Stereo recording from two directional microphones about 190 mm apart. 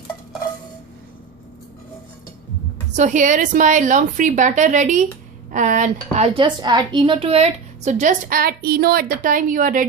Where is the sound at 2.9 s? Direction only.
40° right (ahead or behind).